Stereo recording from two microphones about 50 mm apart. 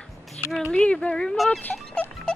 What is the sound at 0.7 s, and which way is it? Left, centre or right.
Speech, left.